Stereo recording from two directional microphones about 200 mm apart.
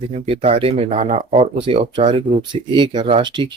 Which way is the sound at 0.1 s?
30° right (ahead or behind).